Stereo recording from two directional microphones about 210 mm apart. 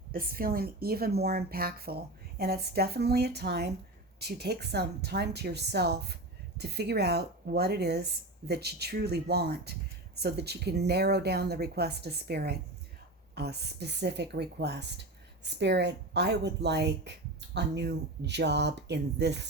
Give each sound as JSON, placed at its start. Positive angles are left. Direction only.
{"t": 0.1, "sound": "speech", "side_deg": -45}